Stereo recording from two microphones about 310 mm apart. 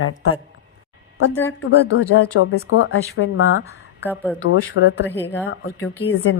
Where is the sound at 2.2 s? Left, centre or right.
Left.